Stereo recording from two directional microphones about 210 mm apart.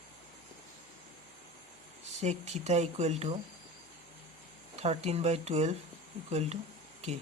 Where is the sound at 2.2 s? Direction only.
30° right (ahead or behind).